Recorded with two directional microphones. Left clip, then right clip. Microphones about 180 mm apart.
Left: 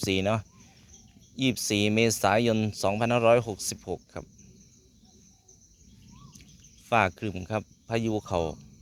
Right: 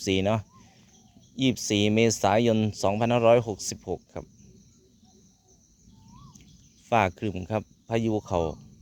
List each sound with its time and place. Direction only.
0.0 s speech: 20° right (ahead or behind)
6.3 s speech: 20° right (ahead or behind)